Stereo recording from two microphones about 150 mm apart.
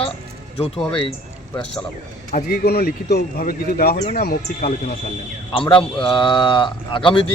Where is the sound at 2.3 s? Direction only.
65° left (ahead or behind); by 4.7 s 80° left.